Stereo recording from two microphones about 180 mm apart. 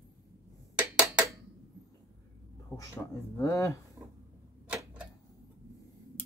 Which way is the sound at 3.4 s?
20° left (ahead or behind).